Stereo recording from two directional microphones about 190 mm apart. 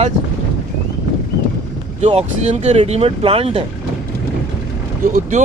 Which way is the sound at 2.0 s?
35° right (ahead or behind).